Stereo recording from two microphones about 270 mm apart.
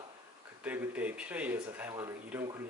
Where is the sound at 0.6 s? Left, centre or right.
Centre.